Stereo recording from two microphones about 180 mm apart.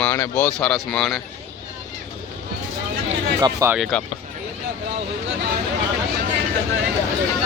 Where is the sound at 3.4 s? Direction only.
20° right (ahead or behind).